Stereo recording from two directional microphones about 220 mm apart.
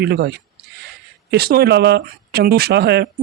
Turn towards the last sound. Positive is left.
turn(degrees=-45)  # may be behind; listen again after turning